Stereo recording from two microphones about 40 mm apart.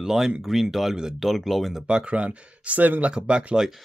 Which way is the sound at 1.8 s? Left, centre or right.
Right.